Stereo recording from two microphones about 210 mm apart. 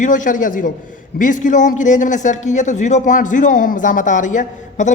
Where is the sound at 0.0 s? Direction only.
40° left (ahead or behind).